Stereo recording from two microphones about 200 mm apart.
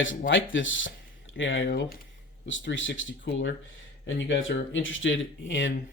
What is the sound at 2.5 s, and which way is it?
Speech, 70° left (ahead or behind).